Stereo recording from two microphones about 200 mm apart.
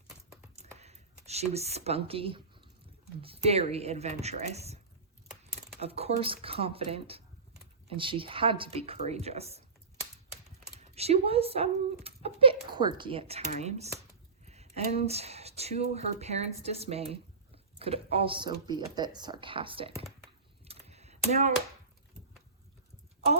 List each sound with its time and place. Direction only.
0.8 s speech: 30° right (ahead or behind)
5.8 s speech: 30° right (ahead or behind)
10.8 s speech: 30° right (ahead or behind)
20.7 s computer keyboard: 30° right (ahead or behind)